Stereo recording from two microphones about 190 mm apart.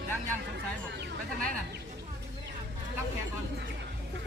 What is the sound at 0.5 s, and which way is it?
Speech, 60° right (ahead or behind).